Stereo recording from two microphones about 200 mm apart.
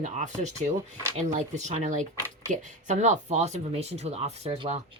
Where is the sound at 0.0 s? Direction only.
35° right (ahead or behind).